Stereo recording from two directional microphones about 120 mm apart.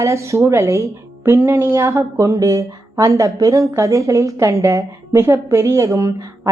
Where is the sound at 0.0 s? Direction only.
25° right (ahead or behind).